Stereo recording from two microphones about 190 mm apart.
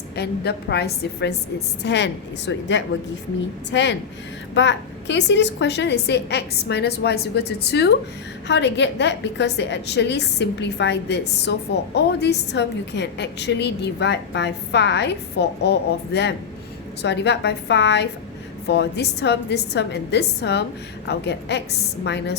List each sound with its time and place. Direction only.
0.2 s a woman's voice: 60° left (ahead or behind)